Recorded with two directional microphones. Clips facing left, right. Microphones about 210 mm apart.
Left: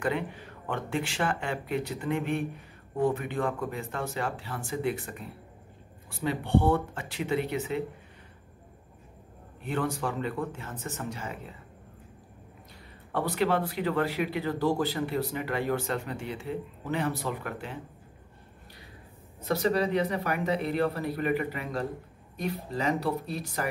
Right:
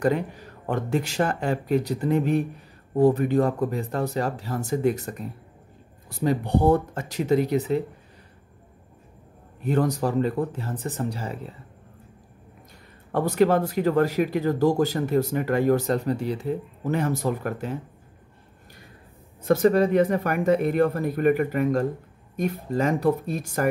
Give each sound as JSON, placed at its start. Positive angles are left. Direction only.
{"t": 0.0, "sound": "speech", "side_deg": -40}
{"t": 9.6, "sound": "speech", "side_deg": -40}
{"t": 13.1, "sound": "speech", "side_deg": -45}
{"t": 19.4, "sound": "speech", "side_deg": -50}